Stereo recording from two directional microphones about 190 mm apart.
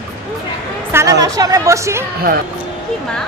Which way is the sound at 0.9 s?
15° right (ahead or behind).